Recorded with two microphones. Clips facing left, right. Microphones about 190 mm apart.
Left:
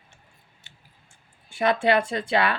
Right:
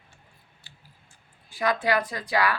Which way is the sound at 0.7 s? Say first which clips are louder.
Right 2 dB; 20° left (ahead or behind).